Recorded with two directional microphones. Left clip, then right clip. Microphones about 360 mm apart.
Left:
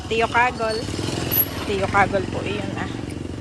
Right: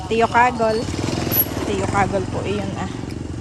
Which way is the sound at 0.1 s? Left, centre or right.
Centre.